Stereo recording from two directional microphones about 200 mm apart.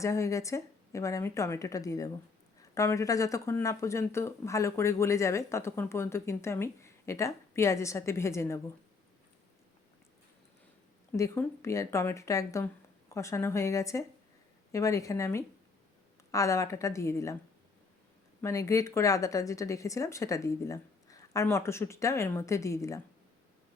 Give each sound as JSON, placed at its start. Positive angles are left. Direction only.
{"t": 0.0, "sound": "speech", "side_deg": 15}
{"t": 11.2, "sound": "speech", "side_deg": 15}
{"t": 18.4, "sound": "speech", "side_deg": 15}